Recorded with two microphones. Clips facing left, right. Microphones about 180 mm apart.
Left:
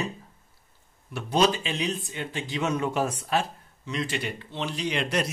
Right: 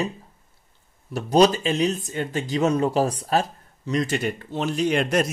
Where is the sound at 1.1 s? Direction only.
40° right (ahead or behind).